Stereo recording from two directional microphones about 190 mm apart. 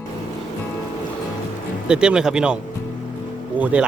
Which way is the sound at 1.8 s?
5° right (ahead or behind).